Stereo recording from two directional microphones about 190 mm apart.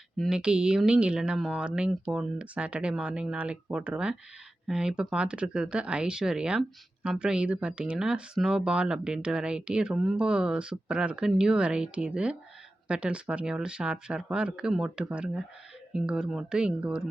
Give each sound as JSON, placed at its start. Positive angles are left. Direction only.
{"t": 0.2, "sound": "speech", "side_deg": -5}